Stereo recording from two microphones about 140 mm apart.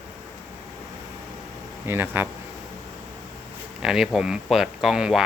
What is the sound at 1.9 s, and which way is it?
Speech, 15° right (ahead or behind).